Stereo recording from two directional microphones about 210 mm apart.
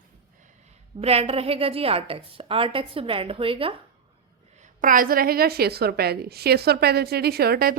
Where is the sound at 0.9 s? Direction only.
30° right (ahead or behind).